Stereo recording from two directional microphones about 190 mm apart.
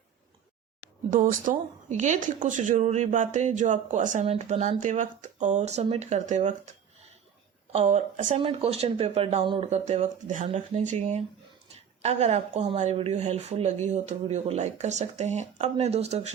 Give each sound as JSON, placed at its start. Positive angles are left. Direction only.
{"t": 1.1, "sound": "speech", "side_deg": -45}
{"t": 7.7, "sound": "speech", "side_deg": -35}